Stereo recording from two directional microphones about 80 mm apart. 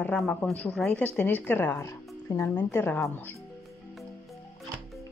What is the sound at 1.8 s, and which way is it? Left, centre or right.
Speech, left.